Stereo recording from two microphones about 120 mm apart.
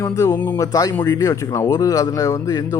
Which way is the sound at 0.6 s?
30° left (ahead or behind).